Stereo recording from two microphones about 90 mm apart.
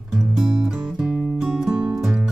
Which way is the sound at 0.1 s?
5° right (ahead or behind).